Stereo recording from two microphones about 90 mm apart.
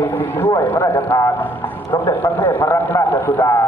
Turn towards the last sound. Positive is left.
turn(degrees=30)  # may be behind; listen again after turning